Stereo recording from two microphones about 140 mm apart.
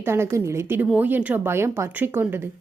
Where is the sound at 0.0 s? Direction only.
15° right (ahead or behind).